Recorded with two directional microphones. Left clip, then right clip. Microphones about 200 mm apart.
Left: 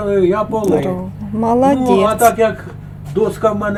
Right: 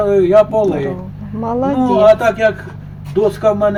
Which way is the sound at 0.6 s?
20° left (ahead or behind).